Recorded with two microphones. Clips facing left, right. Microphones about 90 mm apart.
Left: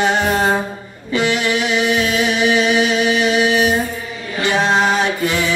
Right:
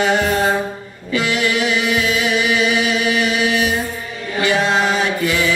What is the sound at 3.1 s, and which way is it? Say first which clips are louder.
Music: left 2 dB; 25° left (ahead or behind).